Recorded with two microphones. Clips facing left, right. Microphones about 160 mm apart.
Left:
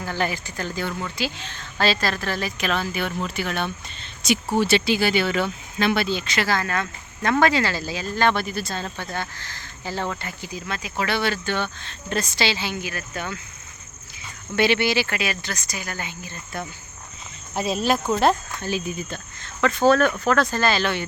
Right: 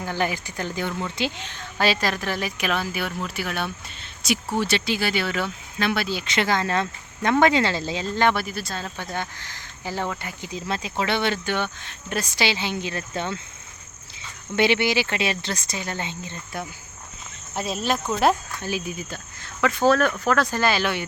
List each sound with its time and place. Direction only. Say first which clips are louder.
0.0 s speech: even; 15° right (ahead or behind)
6.2 s speech: right 1 dB; 20° right (ahead or behind)
8.3 s speech: left 1 dB; 5° right (ahead or behind)
9.0 s speech: even; 15° right (ahead or behind)
10.5 s speech: right 3 dB; 25° right (ahead or behind)
14.5 s speech: even; 20° right (ahead or behind)
17.5 s speech: left 3 dB; centre (ahead or behind)
18.2 s speech: left 1 dB; 10° right (ahead or behind)